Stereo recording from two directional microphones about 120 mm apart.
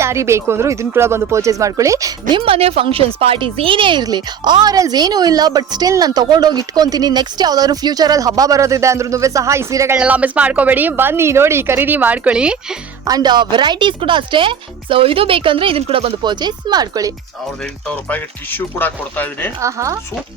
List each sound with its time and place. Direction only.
0.0 s speech: 25° right (ahead or behind)
2.3 s a woman's voice: 50° right (ahead or behind); by 10.0 s 25° right (ahead or behind)
10.0 s a woman's voice: 10° right (ahead or behind)
13.1 s speech: 35° right (ahead or behind); by 16.1 s 55° right (ahead or behind)
16.2 s a woman's voice: 40° right (ahead or behind)
18.1 s speech: 15° left (ahead or behind)
19.6 s speech: 25° right (ahead or behind)